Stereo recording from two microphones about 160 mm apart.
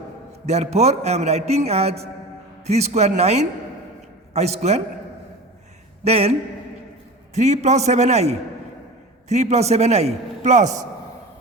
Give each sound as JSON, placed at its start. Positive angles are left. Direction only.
{"t": 0.4, "sound": "a man's voice", "side_deg": -45}
{"t": 6.1, "sound": "a man's voice", "side_deg": -40}
{"t": 7.3, "sound": "a man's voice", "side_deg": -45}